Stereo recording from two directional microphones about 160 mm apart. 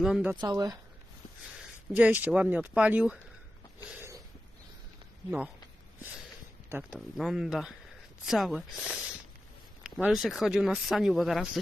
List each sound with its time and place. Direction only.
0.0 s speech: 5° right (ahead or behind)
0.4 s speech: 25° right (ahead or behind)
2.0 s speech: 10° right (ahead or behind)
3.8 s a sound: 15° right (ahead or behind)
6.7 s speech: 15° right (ahead or behind)
7.2 s speech: centre (ahead or behind)